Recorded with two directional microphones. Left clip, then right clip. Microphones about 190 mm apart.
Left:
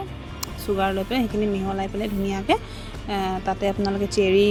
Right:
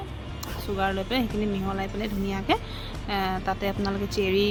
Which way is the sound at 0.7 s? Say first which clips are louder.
Left 2 dB; 20° left (ahead or behind).